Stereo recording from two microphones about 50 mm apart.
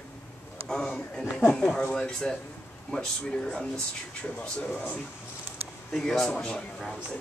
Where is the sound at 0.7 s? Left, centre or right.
Centre.